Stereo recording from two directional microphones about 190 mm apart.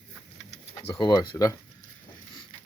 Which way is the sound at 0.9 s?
20° left (ahead or behind).